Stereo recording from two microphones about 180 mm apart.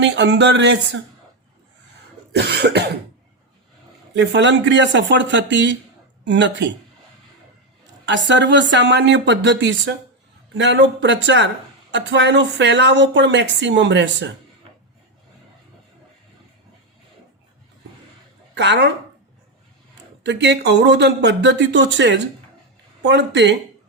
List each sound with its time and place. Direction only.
0.2 s speech: 80° right
2.3 s speech: 65° right (ahead or behind)
4.1 s speech: 80° right
8.0 s speech: 80° right
18.5 s speech: 70° right (ahead or behind)
20.2 s speech: 75° right (ahead or behind)